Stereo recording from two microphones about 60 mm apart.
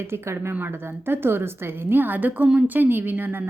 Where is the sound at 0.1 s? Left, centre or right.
Right.